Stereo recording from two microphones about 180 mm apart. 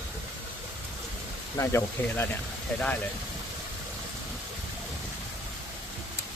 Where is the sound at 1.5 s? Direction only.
15° left (ahead or behind).